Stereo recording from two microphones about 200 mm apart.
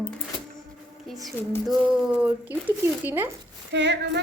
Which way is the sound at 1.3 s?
Centre (ahead or behind).